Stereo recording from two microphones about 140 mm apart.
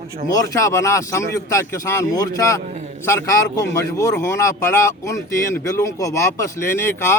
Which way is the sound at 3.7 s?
20° left (ahead or behind).